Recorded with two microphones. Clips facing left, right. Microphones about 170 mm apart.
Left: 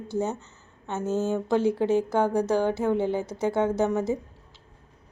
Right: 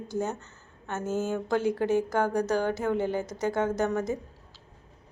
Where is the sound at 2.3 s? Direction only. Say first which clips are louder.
Left 3 dB; 25° left (ahead or behind).